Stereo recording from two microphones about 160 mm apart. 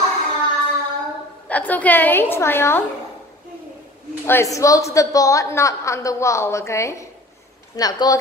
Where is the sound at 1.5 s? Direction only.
10° left (ahead or behind).